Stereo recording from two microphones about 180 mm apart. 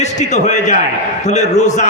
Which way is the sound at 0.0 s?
40° left (ahead or behind).